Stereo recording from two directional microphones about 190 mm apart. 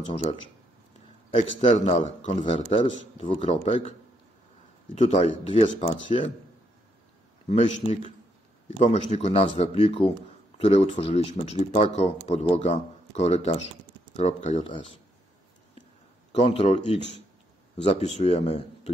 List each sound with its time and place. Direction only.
0.1 s speech: 35° left (ahead or behind)
1.6 s speech: 30° left (ahead or behind)
4.9 s speech: 35° left (ahead or behind)
7.4 s speech: 35° left (ahead or behind)
16.3 s speech: 30° left (ahead or behind)